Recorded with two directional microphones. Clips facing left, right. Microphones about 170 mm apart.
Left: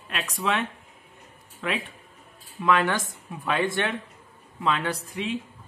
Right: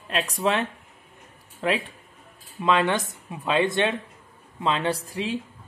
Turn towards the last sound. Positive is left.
turn(degrees=-35)  # may be behind; listen again after turning